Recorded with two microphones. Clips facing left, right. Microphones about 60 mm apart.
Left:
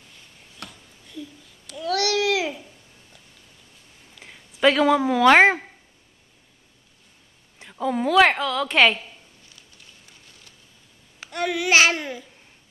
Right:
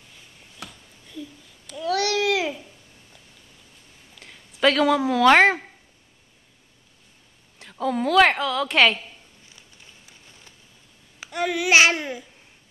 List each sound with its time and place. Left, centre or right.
0.6 s a sound: centre
1.7 s babbling: centre
4.2 s speech: centre
7.7 s a woman's voice: centre
11.1 s a woman's voice: centre